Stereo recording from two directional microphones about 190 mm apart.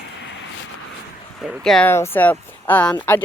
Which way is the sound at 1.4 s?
Centre (ahead or behind).